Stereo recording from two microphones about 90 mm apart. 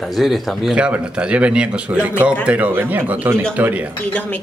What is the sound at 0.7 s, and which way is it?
Speech, 15° right (ahead or behind).